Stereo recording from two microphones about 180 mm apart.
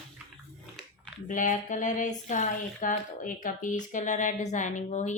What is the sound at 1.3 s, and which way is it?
Speech, 45° left (ahead or behind).